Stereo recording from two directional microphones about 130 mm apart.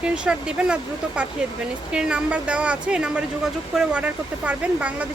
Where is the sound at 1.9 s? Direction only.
5° right (ahead or behind).